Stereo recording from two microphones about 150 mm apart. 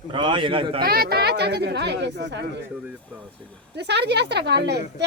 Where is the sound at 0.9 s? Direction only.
90° right.